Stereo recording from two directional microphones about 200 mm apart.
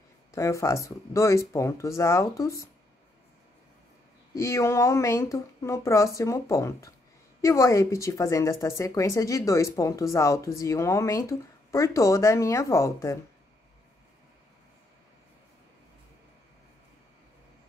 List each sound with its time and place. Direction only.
0.3 s speech: 15° left (ahead or behind)
4.4 s speech: 15° left (ahead or behind)